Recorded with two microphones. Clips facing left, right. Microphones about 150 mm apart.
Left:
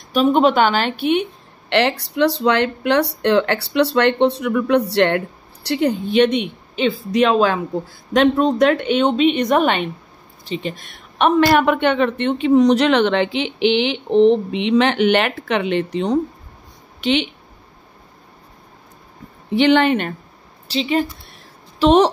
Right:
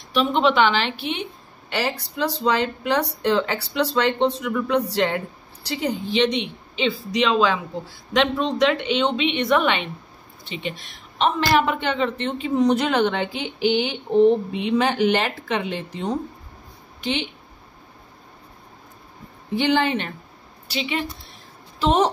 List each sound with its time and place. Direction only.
0.1 s a woman's voice: 45° left (ahead or behind)
1.7 s a woman's voice: 70° left (ahead or behind)
19.5 s a woman's voice: 70° left (ahead or behind)
20.6 s speech: 35° left (ahead or behind)
21.7 s a woman's voice: 80° left